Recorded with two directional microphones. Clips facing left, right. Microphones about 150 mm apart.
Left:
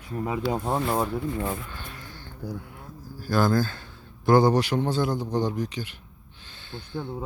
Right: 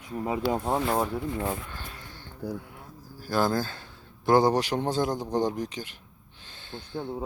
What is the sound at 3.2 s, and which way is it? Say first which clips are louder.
A man's voice: left 3 dB; 30° right (ahead or behind).